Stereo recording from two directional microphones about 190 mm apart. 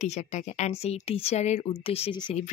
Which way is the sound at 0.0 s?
35° left (ahead or behind).